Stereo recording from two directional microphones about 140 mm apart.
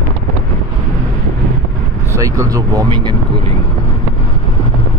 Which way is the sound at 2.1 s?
25° right (ahead or behind).